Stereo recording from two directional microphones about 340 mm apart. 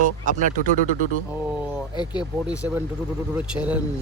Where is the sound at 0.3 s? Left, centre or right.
Right.